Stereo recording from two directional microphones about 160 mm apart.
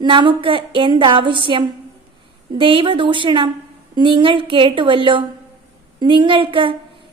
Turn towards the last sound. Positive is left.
turn(degrees=-35)  # may be behind; listen again after turning